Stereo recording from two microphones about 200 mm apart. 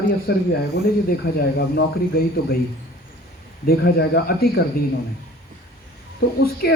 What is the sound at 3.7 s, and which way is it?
Speech, 50° left (ahead or behind).